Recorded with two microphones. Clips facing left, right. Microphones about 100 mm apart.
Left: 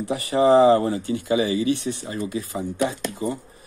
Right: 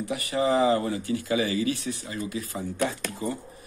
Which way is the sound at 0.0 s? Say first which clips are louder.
Left 6 dB; 30° left (ahead or behind).